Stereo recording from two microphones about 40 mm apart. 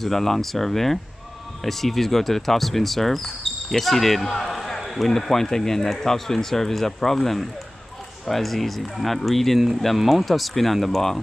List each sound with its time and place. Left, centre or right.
0.0 s speech: centre